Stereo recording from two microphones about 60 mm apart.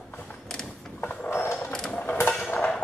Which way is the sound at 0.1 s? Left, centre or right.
Left.